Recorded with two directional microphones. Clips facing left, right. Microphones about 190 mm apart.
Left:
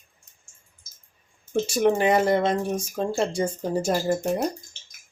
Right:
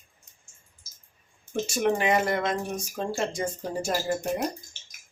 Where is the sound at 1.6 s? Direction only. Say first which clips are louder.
Left 4 dB; 35° left (ahead or behind).